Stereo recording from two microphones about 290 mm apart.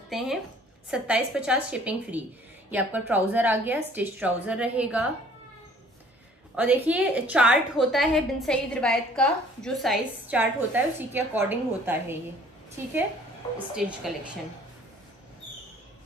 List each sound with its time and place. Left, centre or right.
0.1 s a woman's voice: centre
6.5 s a woman's voice: centre
13.7 s a woman's voice: centre